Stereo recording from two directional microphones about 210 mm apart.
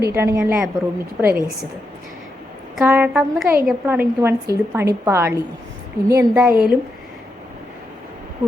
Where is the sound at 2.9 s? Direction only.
10° right (ahead or behind).